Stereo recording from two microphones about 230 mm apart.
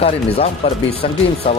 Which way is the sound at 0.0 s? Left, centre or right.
Left.